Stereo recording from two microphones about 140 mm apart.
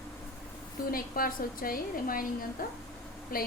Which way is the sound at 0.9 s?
90° left.